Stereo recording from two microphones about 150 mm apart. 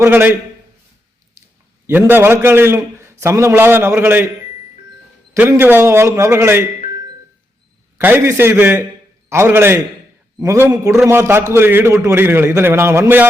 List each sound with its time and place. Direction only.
0.0 s a man's voice: 15° right (ahead or behind)
1.9 s a man's voice: 15° right (ahead or behind)
5.3 s a man's voice: 15° right (ahead or behind)
7.9 s a man's voice: 15° right (ahead or behind)